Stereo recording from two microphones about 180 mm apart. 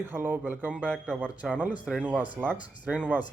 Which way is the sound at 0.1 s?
10° right (ahead or behind).